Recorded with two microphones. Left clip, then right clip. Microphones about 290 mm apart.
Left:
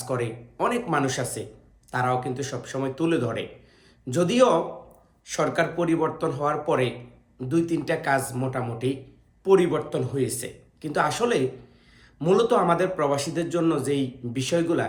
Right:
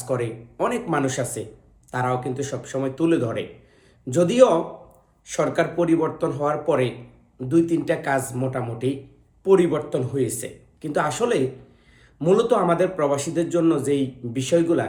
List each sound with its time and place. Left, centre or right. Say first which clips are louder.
0.0 s a man's voice: right 3 dB; centre